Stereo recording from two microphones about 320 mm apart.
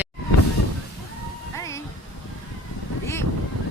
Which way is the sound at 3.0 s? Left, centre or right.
Centre.